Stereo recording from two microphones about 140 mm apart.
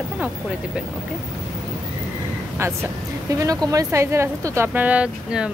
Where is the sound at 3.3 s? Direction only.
25° right (ahead or behind); by 5.5 s 10° right (ahead or behind).